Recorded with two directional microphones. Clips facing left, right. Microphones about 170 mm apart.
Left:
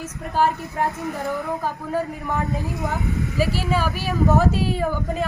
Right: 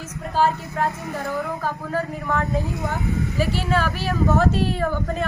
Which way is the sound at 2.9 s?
5° left (ahead or behind).